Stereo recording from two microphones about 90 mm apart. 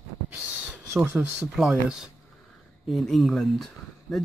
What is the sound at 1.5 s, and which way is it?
Speech, 5° right (ahead or behind).